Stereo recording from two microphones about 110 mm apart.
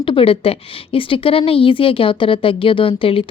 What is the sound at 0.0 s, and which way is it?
A woman's voice, 55° left (ahead or behind).